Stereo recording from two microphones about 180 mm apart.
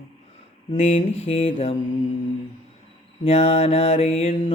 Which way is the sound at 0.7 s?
35° left (ahead or behind).